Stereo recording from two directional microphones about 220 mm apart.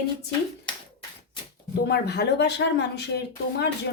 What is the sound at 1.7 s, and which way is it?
Speech, 45° left (ahead or behind).